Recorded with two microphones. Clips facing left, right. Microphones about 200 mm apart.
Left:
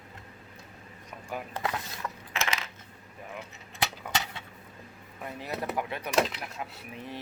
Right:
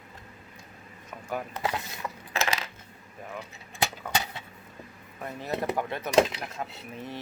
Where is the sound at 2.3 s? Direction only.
35° right (ahead or behind).